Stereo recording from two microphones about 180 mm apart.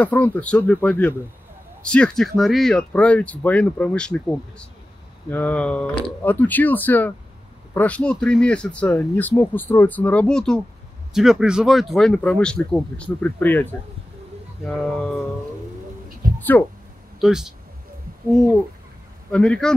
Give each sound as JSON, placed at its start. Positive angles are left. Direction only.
{"t": 0.0, "sound": "speech", "side_deg": 10}
{"t": 16.3, "sound": "a sound", "side_deg": 10}
{"t": 17.2, "sound": "speech", "side_deg": -5}
{"t": 19.3, "sound": "speech", "side_deg": 5}